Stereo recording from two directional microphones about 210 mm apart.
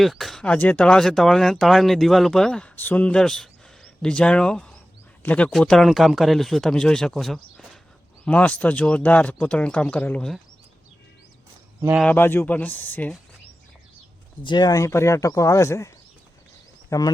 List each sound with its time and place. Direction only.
0.0 s speech: centre (ahead or behind)
11.8 s speech: 10° right (ahead or behind)
12.0 s speech: 10° left (ahead or behind)
14.4 s speech: 20° left (ahead or behind)
16.9 s speech: 15° left (ahead or behind)